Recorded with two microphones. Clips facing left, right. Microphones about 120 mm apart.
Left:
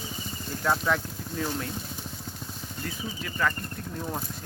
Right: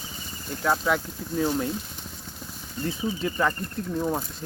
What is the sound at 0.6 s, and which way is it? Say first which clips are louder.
Speech: right 2 dB; 5° right (ahead or behind).